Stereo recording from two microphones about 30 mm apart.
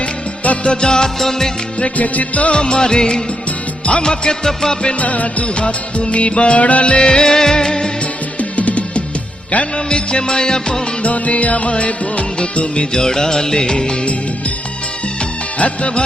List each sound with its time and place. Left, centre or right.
0.0 s music: left
0.7 s music: left
1.2 s music of bollywood: centre
2.0 s music: left
2.5 s music: left
4.4 s music of bollywood: centre
4.9 s music: left
5.5 s music of bollywood: left
6.1 s music: left
6.9 s music: left
8.4 s music: left
9.7 s music: left
11.0 s music: left
15.5 s music: left